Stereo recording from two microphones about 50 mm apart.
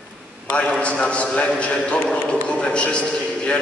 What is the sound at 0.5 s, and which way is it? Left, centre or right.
A man's voice, left.